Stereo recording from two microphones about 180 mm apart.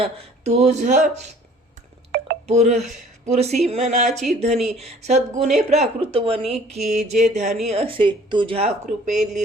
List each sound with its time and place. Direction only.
0.0 s speech: 35° right (ahead or behind)
2.5 s speech: 40° right (ahead or behind)
4.5 s speech: centre (ahead or behind)
4.8 s speech: 35° right (ahead or behind)